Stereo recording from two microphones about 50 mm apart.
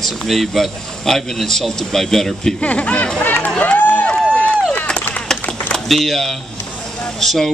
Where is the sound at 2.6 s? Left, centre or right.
Left.